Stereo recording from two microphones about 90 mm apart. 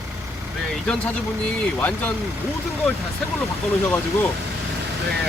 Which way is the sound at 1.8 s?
20° left (ahead or behind).